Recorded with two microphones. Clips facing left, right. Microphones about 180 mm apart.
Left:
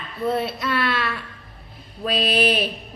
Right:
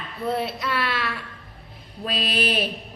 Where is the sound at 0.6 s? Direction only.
10° right (ahead or behind).